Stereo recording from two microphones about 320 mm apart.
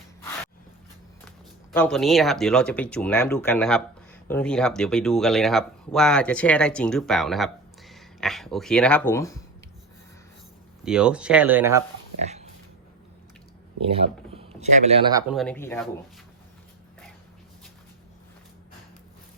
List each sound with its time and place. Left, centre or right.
1.7 s speech: centre
10.8 s speech: centre
12.2 s a sound: right
13.8 s speech: centre
15.3 s speech: centre